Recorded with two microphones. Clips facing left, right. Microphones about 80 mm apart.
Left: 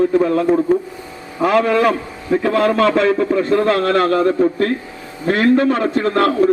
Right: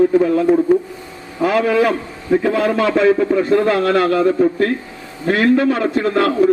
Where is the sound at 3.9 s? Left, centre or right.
Left.